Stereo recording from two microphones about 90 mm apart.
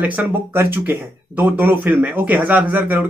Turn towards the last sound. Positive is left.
turn(degrees=-20)  # may be behind; listen again after turning